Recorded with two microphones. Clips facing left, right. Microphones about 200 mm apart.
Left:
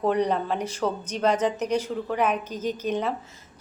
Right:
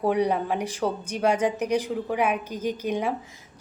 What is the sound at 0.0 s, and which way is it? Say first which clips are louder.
Speech: even; 10° right (ahead or behind).